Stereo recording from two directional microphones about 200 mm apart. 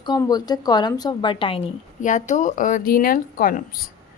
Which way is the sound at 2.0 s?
40° left (ahead or behind).